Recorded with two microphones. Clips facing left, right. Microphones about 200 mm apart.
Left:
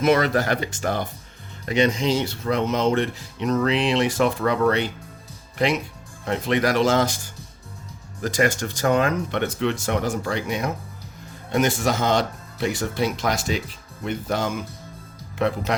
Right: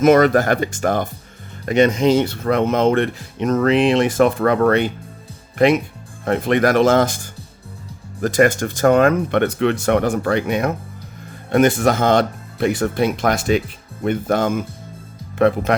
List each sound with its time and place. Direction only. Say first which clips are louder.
0.0 s speech: right 7 dB; 50° right (ahead or behind)
8.2 s speech: right 7 dB; 55° right (ahead or behind)